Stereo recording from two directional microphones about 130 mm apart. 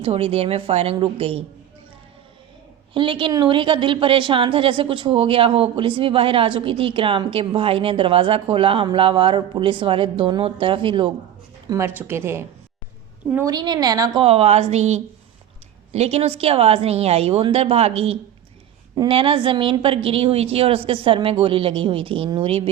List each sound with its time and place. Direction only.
0.0 s a woman's voice: 45° right (ahead or behind)
2.9 s a woman's voice: 40° right (ahead or behind)
11.7 s a woman's voice: 20° right (ahead or behind)
13.4 s a woman's voice: 30° right (ahead or behind)
14.2 s a woman's voice: 50° right (ahead or behind)